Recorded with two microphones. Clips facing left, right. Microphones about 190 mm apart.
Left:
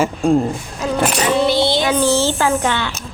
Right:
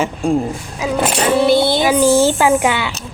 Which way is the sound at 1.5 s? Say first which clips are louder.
Right 3 dB; 55° right (ahead or behind).